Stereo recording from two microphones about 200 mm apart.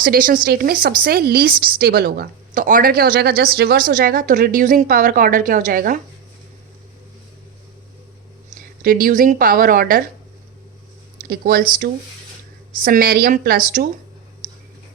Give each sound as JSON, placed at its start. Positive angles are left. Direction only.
{"t": 0.0, "sound": "speech", "side_deg": -45}
{"t": 8.8, "sound": "speech", "side_deg": -45}
{"t": 11.3, "sound": "speech", "side_deg": -50}